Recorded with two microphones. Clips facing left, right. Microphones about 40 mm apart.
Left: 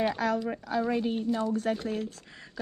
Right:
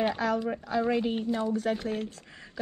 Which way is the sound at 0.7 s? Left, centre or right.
Right.